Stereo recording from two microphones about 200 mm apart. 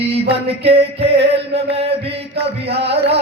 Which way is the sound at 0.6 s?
30° right (ahead or behind).